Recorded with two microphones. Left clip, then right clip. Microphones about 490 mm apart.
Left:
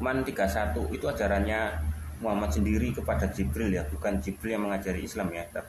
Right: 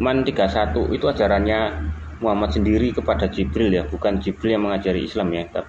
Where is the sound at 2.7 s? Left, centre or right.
Left.